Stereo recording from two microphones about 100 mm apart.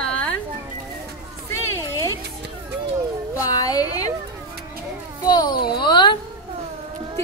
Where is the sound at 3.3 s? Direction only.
35° left (ahead or behind).